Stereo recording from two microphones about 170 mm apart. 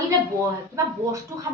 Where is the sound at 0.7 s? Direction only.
20° right (ahead or behind).